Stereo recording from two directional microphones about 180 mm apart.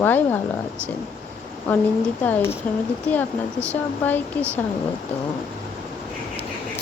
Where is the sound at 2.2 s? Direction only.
10° left (ahead or behind).